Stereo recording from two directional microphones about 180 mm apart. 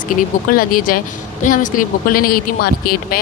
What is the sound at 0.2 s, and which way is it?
A woman's voice, 50° left (ahead or behind).